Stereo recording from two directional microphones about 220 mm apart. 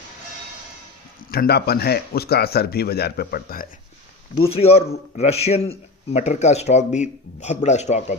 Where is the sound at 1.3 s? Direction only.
45° left (ahead or behind).